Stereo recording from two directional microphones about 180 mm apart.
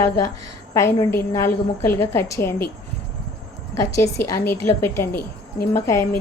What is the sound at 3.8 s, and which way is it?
A woman's voice, 15° left (ahead or behind).